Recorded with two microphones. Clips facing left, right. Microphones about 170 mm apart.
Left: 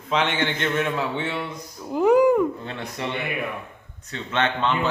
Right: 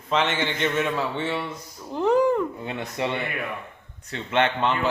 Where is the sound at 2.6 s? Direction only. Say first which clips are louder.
Right 3 dB; 20° right (ahead or behind).